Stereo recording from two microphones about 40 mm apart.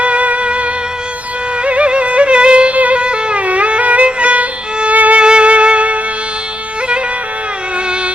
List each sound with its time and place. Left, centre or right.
0.0 s music: right
5.2 s music: right